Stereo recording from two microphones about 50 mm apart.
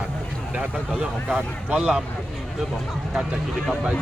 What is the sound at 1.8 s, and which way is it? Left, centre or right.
Speech, centre.